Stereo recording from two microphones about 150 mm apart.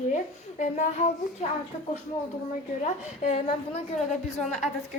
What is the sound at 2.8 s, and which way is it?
Speech, 50° left (ahead or behind).